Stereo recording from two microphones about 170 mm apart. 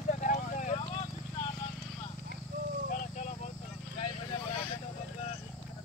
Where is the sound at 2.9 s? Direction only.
45° left (ahead or behind).